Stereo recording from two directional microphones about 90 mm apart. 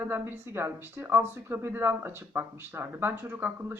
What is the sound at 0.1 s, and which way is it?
Speech, 25° right (ahead or behind).